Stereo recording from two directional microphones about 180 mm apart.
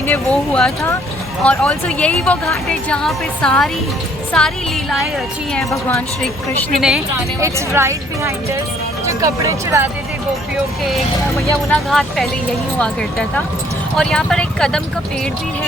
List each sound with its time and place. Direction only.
0.1 s speech: 5° left (ahead or behind)
6.7 s speech: 5° right (ahead or behind)
7.4 s a woman's voice: 15° right (ahead or behind)
11.7 s speech: centre (ahead or behind)